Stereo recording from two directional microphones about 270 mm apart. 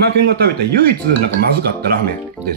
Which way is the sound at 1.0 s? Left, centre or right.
Right.